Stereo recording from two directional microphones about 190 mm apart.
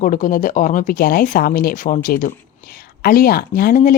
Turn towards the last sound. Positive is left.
turn(degrees=45)  # may be behind; listen again after turning